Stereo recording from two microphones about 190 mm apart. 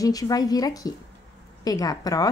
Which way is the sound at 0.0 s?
20° left (ahead or behind).